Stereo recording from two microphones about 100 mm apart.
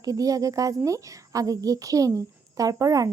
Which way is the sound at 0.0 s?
35° right (ahead or behind).